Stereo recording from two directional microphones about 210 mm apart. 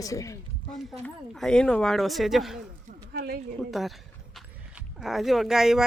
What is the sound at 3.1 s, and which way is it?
Speech, 50° right (ahead or behind).